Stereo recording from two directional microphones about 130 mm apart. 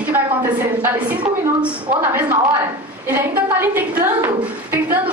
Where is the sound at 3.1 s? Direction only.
15° right (ahead or behind).